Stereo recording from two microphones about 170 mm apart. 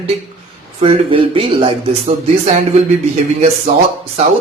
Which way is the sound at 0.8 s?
30° right (ahead or behind).